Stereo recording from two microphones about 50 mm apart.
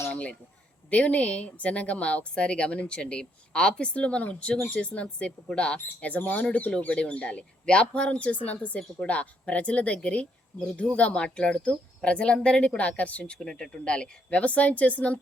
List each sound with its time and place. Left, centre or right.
0.1 s speech: left
13.4 s speech: centre; by 15.2 s left